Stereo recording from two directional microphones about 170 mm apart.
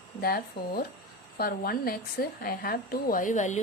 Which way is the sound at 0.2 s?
60° left (ahead or behind).